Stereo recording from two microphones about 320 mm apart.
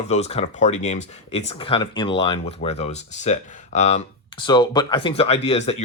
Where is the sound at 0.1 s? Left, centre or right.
Centre.